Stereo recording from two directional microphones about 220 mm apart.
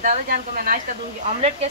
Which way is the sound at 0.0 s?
40° right (ahead or behind).